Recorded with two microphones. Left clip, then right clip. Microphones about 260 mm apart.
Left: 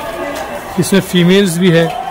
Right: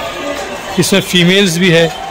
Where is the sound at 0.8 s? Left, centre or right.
Centre.